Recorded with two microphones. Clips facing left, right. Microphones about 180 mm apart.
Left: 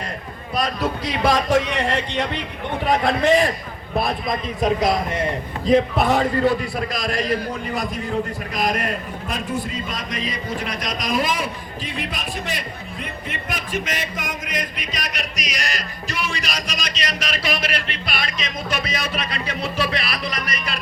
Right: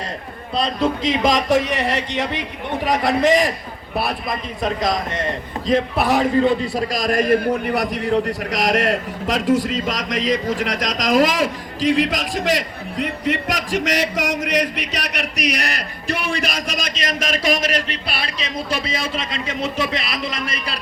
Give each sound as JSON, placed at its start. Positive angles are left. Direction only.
{"t": 0.5, "sound": "speech", "side_deg": -20}
{"t": 6.0, "sound": "speech", "side_deg": -10}
{"t": 6.7, "sound": "a man's voice", "side_deg": -40}